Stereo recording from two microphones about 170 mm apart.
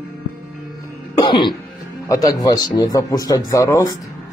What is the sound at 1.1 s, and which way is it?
Throat clearing, 25° left (ahead or behind).